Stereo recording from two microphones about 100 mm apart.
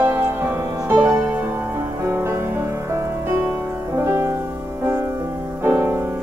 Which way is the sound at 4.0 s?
30° right (ahead or behind).